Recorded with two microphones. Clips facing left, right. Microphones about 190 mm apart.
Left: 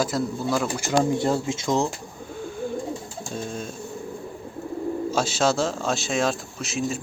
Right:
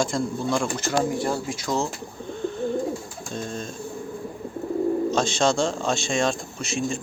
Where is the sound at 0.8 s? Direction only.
25° left (ahead or behind).